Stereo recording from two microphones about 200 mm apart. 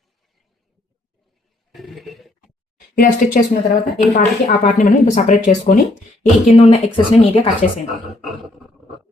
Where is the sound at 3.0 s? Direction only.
45° left (ahead or behind).